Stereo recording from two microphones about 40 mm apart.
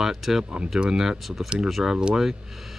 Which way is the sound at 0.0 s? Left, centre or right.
Centre.